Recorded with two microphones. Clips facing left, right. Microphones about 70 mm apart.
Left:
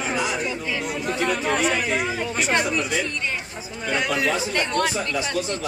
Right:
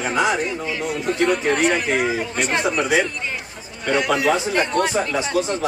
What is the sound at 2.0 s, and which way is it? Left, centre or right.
Speech, centre.